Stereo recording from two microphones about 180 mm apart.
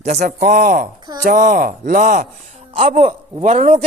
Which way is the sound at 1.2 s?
45° right (ahead or behind).